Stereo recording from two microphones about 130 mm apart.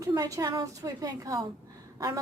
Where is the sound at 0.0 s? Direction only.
25° right (ahead or behind).